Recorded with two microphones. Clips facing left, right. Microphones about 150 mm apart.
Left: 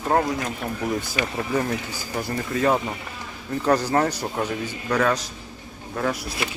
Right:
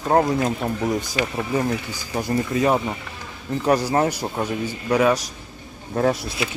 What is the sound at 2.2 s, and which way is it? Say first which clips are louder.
Speech: right 4 dB; 20° right (ahead or behind).